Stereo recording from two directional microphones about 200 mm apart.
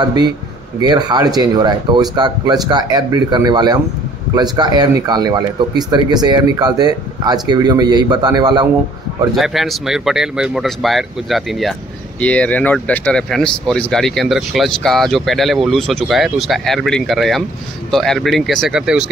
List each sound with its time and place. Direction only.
0.0 s speech: 20° right (ahead or behind)
9.3 s speech: centre (ahead or behind)